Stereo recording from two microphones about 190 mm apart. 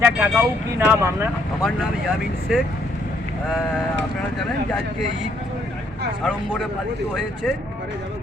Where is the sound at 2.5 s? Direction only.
5° right (ahead or behind).